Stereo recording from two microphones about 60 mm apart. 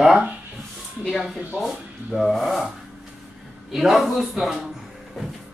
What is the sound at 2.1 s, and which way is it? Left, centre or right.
Speech, centre.